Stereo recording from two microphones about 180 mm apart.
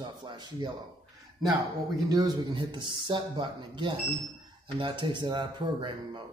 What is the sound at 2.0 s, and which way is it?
Speech, 20° right (ahead or behind).